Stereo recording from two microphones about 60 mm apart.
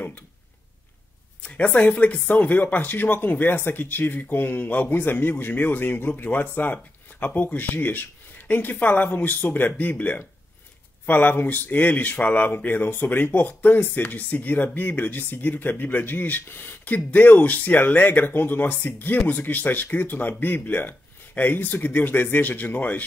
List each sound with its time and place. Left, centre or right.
1.4 s speech: left